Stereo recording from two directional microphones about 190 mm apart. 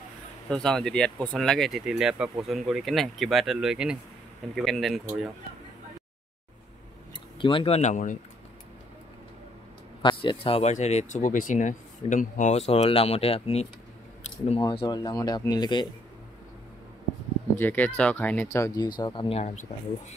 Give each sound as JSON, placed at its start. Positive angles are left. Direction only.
{"t": 0.5, "sound": "speech", "side_deg": 5}
{"t": 7.3, "sound": "speech", "side_deg": 25}
{"t": 10.0, "sound": "speech", "side_deg": 25}
{"t": 17.6, "sound": "speech", "side_deg": 10}